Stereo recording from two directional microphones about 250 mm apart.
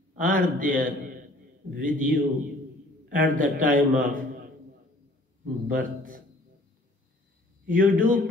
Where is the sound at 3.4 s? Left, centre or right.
Right.